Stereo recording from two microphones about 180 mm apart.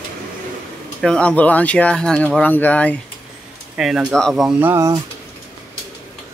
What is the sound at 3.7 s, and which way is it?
Speech, 5° right (ahead or behind).